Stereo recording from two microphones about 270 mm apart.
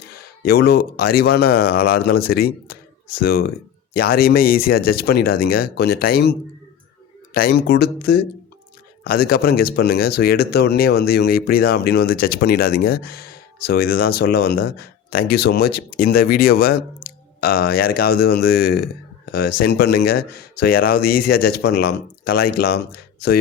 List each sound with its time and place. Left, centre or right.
0.4 s speech: left
7.3 s speech: left